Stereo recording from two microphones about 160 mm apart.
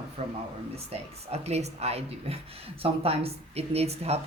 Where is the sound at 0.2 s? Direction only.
45° right (ahead or behind).